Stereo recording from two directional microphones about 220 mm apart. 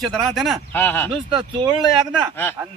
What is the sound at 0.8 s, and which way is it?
Speech, 10° left (ahead or behind).